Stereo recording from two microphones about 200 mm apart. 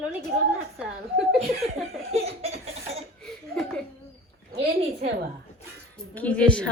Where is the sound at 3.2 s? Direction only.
5° left (ahead or behind).